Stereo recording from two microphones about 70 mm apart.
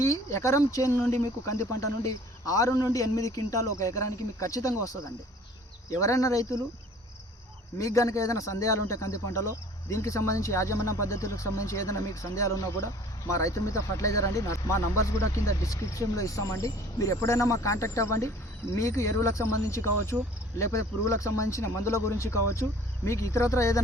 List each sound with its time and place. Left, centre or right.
0.0 s speech: left
7.8 s speech: left